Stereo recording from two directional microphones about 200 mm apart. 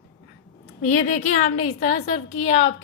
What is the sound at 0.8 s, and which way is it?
A woman's voice, 40° left (ahead or behind).